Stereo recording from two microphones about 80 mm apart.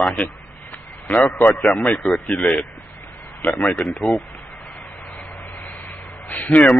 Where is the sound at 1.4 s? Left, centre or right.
Centre.